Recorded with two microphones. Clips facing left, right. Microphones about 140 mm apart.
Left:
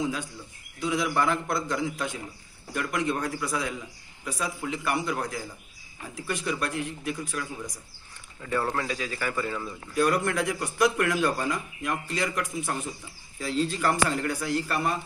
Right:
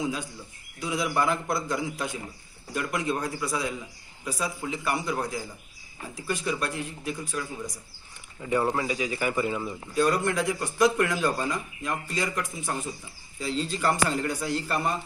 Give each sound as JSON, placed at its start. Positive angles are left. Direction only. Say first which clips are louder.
{"t": 0.0, "sound": "a man's voice", "louder": "even", "side_deg": -5}
{"t": 8.4, "sound": "speech", "louder": "right 3 dB", "side_deg": -15}
{"t": 9.9, "sound": "a man's voice", "louder": "even", "side_deg": 5}